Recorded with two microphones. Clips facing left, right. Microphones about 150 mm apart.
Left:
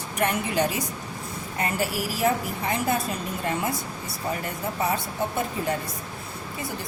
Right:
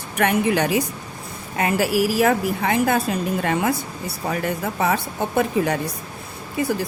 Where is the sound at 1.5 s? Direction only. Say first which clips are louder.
Right 8 dB; 85° right.